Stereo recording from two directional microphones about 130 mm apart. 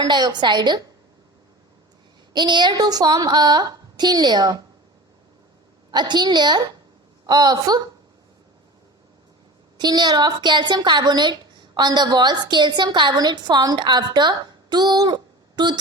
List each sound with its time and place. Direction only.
0.0 s a woman's voice: 35° right (ahead or behind)
2.3 s a woman's voice: 35° right (ahead or behind)
5.9 s a woman's voice: 35° right (ahead or behind)
9.7 s a woman's voice: 35° right (ahead or behind)